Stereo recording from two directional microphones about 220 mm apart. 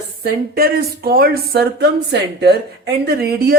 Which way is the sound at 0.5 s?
45° right (ahead or behind).